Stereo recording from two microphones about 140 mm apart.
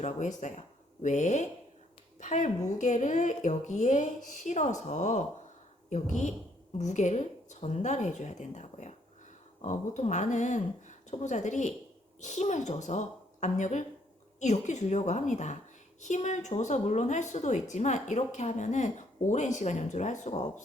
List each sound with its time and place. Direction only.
0.0 s a woman's voice: 55° left (ahead or behind)